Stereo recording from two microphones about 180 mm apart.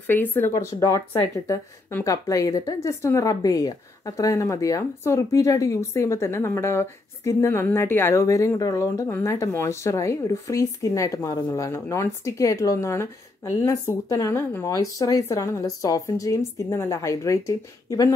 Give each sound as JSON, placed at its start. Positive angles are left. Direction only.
{"t": 0.0, "sound": "a woman's voice", "side_deg": 10}